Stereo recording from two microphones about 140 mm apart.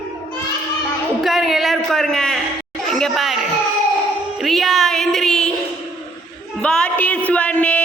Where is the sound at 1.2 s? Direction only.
Centre (ahead or behind).